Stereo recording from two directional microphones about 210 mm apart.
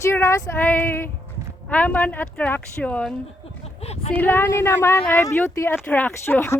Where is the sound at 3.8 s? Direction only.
30° left (ahead or behind).